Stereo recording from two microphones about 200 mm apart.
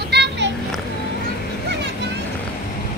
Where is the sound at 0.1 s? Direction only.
60° right (ahead or behind).